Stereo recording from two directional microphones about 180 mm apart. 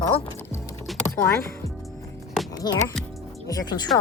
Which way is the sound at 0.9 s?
Centre (ahead or behind).